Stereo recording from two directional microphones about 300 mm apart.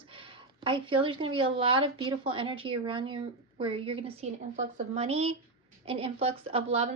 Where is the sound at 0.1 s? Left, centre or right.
Centre.